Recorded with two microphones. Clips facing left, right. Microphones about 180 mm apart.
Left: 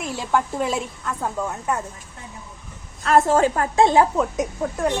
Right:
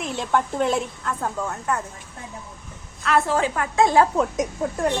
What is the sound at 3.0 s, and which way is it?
Speech, 45° left (ahead or behind).